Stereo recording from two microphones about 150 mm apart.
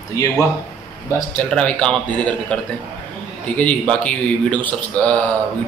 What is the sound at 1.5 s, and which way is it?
A man's voice, 5° left (ahead or behind).